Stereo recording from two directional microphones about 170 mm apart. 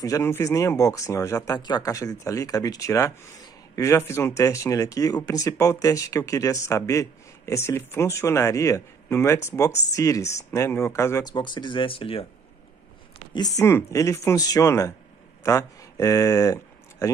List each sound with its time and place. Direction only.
0.0 s speech: 15° left (ahead or behind)
11.3 s speech: 25° left (ahead or behind)
13.3 s speech: 25° left (ahead or behind)